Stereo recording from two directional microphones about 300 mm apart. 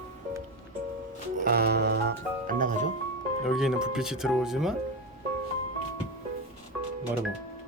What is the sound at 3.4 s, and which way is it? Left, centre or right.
Speech, centre.